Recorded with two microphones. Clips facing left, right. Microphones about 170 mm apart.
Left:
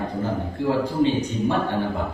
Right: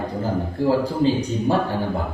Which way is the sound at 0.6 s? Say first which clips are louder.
Right 4 dB; 35° right (ahead or behind).